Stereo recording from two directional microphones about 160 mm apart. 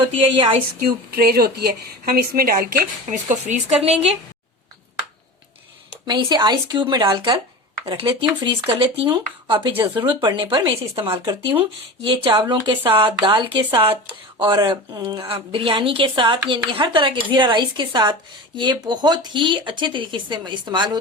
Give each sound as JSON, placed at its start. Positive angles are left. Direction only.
{"t": 0.0, "sound": "speech", "side_deg": -30}
{"t": 0.9, "sound": "a woman's voice", "side_deg": -75}
{"t": 6.1, "sound": "a woman's voice", "side_deg": -25}